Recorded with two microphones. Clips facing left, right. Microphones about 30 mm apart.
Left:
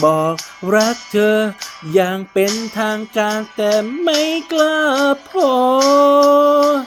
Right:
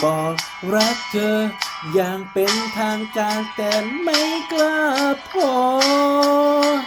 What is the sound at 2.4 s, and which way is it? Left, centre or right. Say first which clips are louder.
Speech: left 2 dB; right.